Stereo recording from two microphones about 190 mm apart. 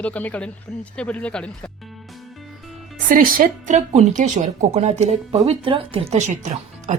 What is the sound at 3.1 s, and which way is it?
A woman's voice, 45° right (ahead or behind).